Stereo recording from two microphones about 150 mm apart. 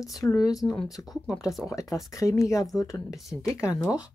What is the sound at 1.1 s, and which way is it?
Speech, centre (ahead or behind).